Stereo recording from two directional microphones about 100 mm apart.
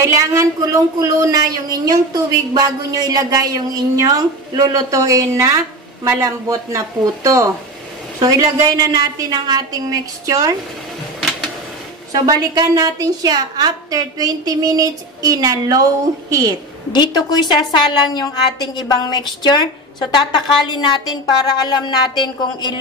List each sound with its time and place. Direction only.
0.0 s a woman's voice: 30° right (ahead or behind)
11.1 s a sound: centre (ahead or behind)
12.1 s a woman's voice: 40° right (ahead or behind)
16.9 s a woman's voice: 45° left (ahead or behind)